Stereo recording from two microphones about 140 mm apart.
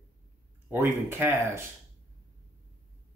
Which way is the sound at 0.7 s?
15° right (ahead or behind).